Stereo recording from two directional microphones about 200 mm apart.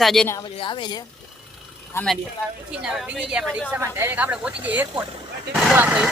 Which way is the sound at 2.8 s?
5° right (ahead or behind).